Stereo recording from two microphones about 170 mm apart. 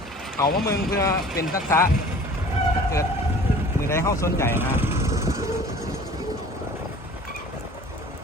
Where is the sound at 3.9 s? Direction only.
15° left (ahead or behind).